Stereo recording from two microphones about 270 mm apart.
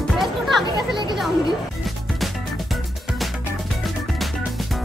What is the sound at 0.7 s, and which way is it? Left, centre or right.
Speech, centre.